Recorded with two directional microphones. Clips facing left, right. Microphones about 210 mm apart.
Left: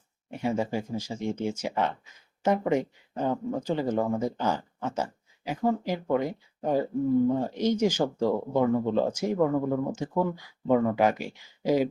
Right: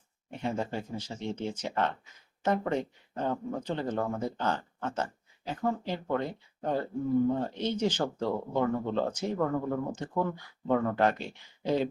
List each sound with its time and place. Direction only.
0.3 s speech: 10° left (ahead or behind)